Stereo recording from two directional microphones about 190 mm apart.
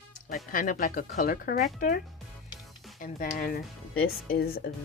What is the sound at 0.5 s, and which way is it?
Speech, 45° left (ahead or behind).